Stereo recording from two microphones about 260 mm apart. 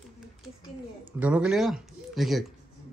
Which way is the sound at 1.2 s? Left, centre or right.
Centre.